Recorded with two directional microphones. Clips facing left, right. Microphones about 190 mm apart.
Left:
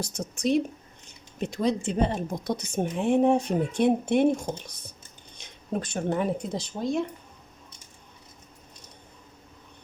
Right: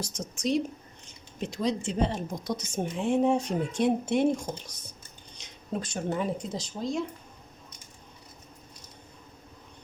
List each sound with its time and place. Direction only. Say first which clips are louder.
0.0 s a woman's voice: left 3 dB; 60° left (ahead or behind)
5.8 s a woman's voice: left 3 dB; 55° left (ahead or behind)